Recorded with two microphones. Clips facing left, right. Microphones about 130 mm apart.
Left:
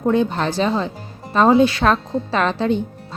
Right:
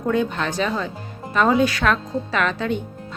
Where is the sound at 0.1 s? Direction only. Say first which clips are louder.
Left 3 dB; 30° left (ahead or behind).